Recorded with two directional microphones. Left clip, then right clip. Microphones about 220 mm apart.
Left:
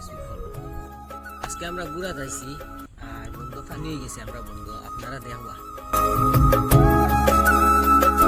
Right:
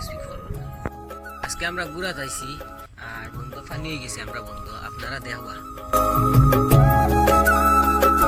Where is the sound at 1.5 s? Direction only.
15° left (ahead or behind).